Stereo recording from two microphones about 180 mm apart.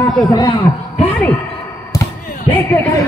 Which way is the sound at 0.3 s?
20° left (ahead or behind).